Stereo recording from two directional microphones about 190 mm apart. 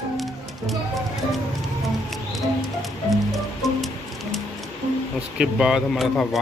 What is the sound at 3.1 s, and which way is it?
Music, centre (ahead or behind).